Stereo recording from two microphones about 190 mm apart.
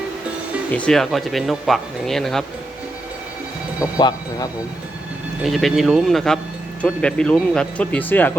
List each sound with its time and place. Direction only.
0.7 s speech: 5° left (ahead or behind)
3.9 s speech: 20° left (ahead or behind)
5.4 s speech: centre (ahead or behind)